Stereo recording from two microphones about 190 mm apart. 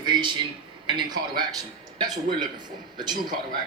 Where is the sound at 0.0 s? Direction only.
25° right (ahead or behind).